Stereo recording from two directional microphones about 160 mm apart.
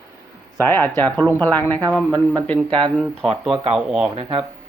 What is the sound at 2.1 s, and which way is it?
Speech, 25° right (ahead or behind).